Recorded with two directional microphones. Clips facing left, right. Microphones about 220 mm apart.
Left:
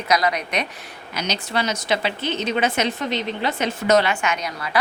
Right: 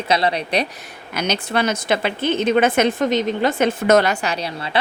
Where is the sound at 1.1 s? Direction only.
55° right (ahead or behind).